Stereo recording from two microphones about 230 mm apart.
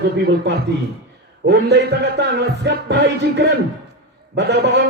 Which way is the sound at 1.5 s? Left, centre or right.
Right.